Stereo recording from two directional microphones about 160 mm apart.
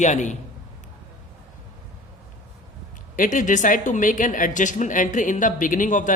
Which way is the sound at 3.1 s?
55° left (ahead or behind).